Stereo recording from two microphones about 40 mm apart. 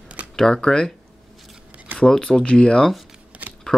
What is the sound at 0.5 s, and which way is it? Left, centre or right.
Speech, centre.